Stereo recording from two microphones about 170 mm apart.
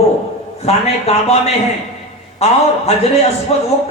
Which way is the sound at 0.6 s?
40° left (ahead or behind).